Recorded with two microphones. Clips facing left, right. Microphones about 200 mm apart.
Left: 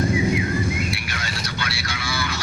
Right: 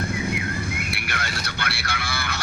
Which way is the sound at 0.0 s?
60° right (ahead or behind).